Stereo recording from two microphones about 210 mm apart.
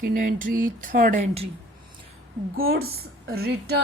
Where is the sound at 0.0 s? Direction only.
40° right (ahead or behind).